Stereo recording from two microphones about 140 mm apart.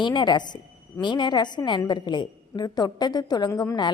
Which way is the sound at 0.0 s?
30° left (ahead or behind).